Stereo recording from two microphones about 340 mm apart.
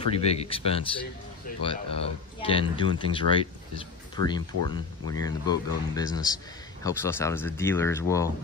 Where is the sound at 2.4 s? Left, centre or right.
Centre.